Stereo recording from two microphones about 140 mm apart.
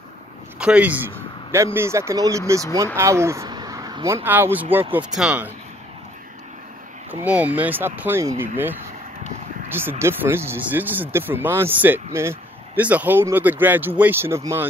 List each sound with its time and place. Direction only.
0.6 s speech: 10° right (ahead or behind)
7.1 s speech: 10° right (ahead or behind)
9.7 s speech: 15° right (ahead or behind)